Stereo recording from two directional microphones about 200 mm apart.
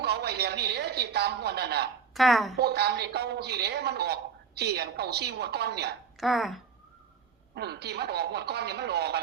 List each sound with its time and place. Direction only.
0.0 s a woman's voice: 55° right (ahead or behind)
2.1 s a woman's voice: centre (ahead or behind)
2.6 s a man's voice: 55° right (ahead or behind)
6.1 s a woman's voice: centre (ahead or behind)
7.5 s a man's voice: 55° right (ahead or behind)